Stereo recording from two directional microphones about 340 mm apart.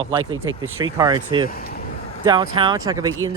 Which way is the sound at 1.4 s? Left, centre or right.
Left.